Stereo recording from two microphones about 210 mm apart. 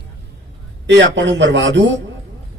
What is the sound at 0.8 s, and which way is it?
Music, 55° right (ahead or behind).